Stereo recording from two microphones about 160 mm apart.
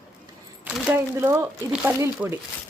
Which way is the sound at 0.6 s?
5° right (ahead or behind).